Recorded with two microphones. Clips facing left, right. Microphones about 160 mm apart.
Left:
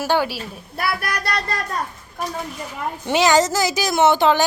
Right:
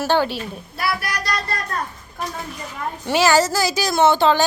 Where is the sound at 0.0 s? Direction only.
10° left (ahead or behind).